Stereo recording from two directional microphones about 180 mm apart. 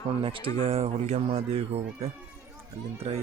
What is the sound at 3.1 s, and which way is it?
Speech, 30° right (ahead or behind).